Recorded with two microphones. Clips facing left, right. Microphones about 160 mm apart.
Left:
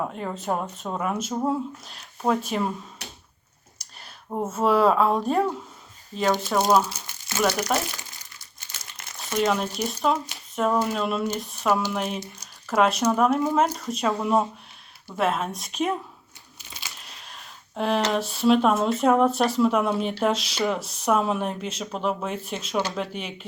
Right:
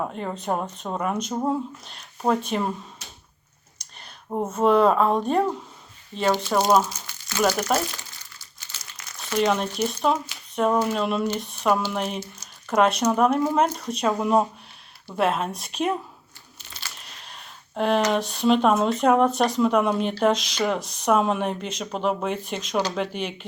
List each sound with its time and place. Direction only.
0.0 s speech: centre (ahead or behind)
3.0 s finger snapping: 70° left (ahead or behind)
3.8 s a sound: 5° left (ahead or behind)
4.4 s speech: 5° left (ahead or behind)
9.4 s speech: centre (ahead or behind)
11.3 s a sound: centre (ahead or behind)
11.9 s speech: centre (ahead or behind)
16.6 s crunch: 15° left (ahead or behind)
17.0 s a sound: centre (ahead or behind)
18.1 s speech: centre (ahead or behind)